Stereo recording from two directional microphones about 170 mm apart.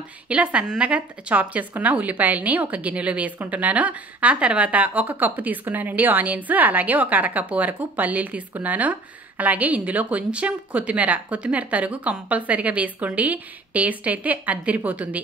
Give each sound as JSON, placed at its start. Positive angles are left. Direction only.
{"t": 0.3, "sound": "a woman's voice", "side_deg": -5}